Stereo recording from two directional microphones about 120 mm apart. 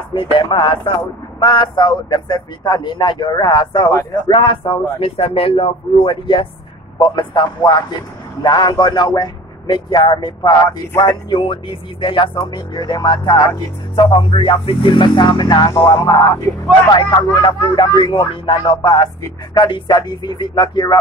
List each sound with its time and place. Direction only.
0.1 s speech: 45° left (ahead or behind)
15.7 s music: 20° left (ahead or behind)
16.9 s speech: 35° left (ahead or behind)